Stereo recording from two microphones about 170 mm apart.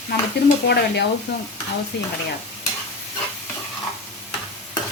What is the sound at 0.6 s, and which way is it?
Speech, 80° left.